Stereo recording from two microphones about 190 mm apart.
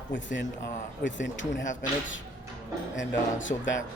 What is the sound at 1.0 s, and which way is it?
Speech, 70° left (ahead or behind).